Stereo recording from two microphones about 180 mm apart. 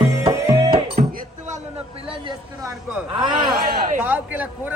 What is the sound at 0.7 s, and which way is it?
Music, 45° right (ahead or behind).